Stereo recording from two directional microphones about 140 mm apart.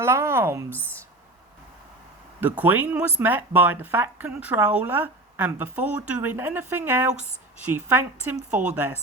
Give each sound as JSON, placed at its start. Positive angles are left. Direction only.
{"t": 0.0, "sound": "speech", "side_deg": -20}
{"t": 0.7, "sound": "speech", "side_deg": 10}
{"t": 2.4, "sound": "speech", "side_deg": -10}